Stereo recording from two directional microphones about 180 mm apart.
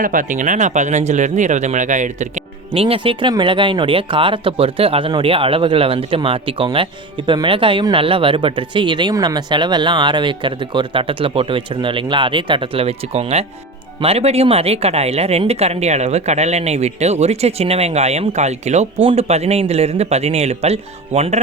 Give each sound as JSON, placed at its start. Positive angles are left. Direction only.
{"t": 0.0, "sound": "speech", "side_deg": -50}
{"t": 2.8, "sound": "speech", "side_deg": -30}